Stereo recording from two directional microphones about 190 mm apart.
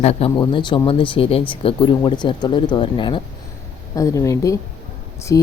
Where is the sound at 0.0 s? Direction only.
30° left (ahead or behind).